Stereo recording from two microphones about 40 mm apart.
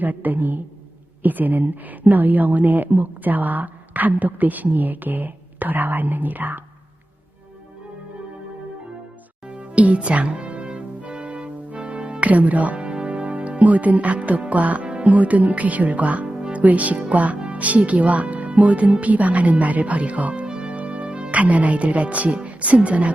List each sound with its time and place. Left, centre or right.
0.0 s a woman's voice: right
9.5 s music: right
14.5 s speech: right
16.2 s music: right
16.6 s speech: right
20.4 s music: right
22.4 s speech: right